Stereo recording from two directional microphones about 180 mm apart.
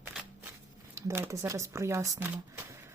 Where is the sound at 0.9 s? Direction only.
15° right (ahead or behind).